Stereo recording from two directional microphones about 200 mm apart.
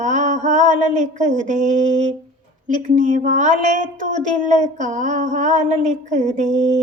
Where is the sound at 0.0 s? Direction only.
35° right (ahead or behind).